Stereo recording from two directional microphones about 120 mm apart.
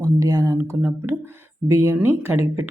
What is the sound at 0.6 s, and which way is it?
Speech, 20° right (ahead or behind).